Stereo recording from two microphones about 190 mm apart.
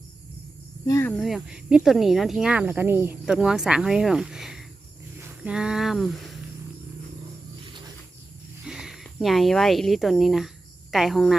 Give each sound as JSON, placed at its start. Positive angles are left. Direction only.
{"t": 0.9, "sound": "speech", "side_deg": 15}
{"t": 1.1, "sound": "speech", "side_deg": 0}
{"t": 8.6, "sound": "speech", "side_deg": -5}